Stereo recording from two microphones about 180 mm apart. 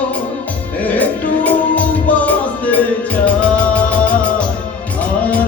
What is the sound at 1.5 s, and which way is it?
Music, 10° left (ahead or behind).